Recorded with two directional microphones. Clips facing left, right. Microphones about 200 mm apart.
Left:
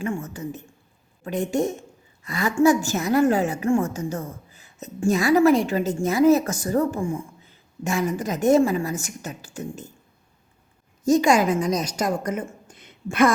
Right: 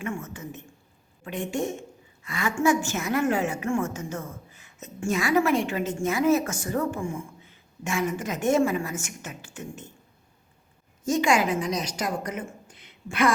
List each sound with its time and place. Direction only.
0.0 s a woman's voice: 35° left (ahead or behind)
11.0 s a woman's voice: 40° left (ahead or behind)